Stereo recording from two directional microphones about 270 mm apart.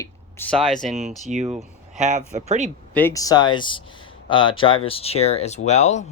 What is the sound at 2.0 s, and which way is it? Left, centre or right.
Speech, right.